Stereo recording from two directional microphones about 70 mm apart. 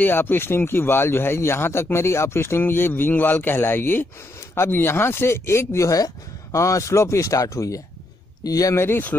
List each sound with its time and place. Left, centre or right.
0.0 s speech: left
5.9 s speech: left
8.7 s speech: left